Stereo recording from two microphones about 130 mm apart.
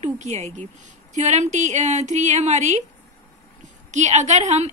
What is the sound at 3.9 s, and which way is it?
Speech, 65° right (ahead or behind).